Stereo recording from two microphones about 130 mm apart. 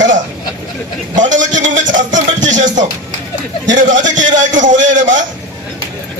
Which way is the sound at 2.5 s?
75° right (ahead or behind).